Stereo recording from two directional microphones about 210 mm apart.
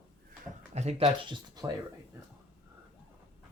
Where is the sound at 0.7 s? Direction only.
30° right (ahead or behind).